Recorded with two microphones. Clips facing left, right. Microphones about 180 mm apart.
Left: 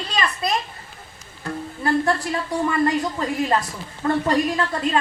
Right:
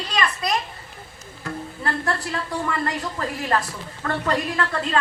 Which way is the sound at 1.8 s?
20° left (ahead or behind).